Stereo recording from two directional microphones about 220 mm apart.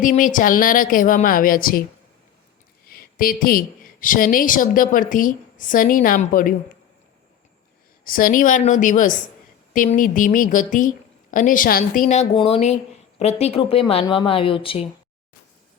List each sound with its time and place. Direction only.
0.0 s a woman's voice: 35° left (ahead or behind)
2.9 s a woman's voice: 40° left (ahead or behind)
8.0 s a woman's voice: 40° left (ahead or behind); by 14.8 s 25° left (ahead or behind)